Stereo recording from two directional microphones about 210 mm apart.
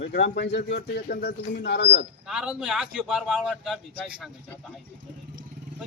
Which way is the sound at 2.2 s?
5° right (ahead or behind).